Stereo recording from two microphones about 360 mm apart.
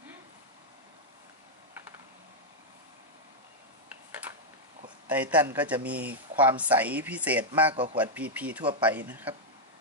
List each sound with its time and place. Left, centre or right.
4.8 s speech: centre